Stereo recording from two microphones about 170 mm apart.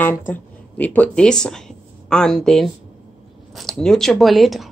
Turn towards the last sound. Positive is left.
turn(degrees=0)  # may be behind; listen again after turning